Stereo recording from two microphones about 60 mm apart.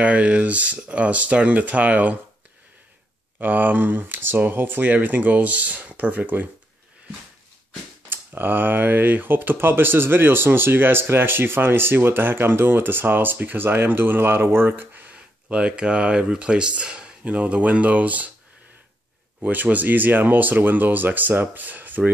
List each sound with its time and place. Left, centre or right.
0.0 s speech: right
3.3 s speech: right
8.1 s speech: right
14.9 s a sound: right
15.5 s speech: centre
19.4 s speech: right